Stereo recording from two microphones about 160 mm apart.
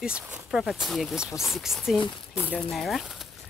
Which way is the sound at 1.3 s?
15° left (ahead or behind).